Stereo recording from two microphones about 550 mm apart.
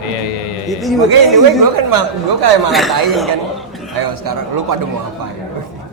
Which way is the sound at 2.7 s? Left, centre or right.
Centre.